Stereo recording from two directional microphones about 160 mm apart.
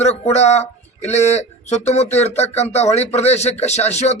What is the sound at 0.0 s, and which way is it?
A man's voice, 45° left (ahead or behind).